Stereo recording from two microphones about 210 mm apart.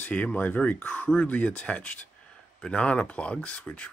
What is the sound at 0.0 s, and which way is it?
Speech, 5° left (ahead or behind).